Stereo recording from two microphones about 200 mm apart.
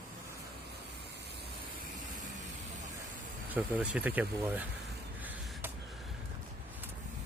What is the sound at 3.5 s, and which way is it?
Speech, 5° right (ahead or behind).